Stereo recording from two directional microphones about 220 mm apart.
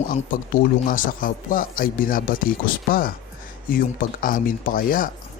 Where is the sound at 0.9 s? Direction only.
40° left (ahead or behind).